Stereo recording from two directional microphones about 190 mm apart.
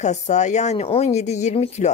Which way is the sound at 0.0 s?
40° left (ahead or behind).